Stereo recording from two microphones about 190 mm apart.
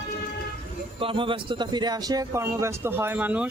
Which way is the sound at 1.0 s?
25° right (ahead or behind).